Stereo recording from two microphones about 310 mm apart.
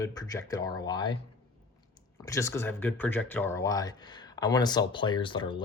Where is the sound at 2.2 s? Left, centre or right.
Centre.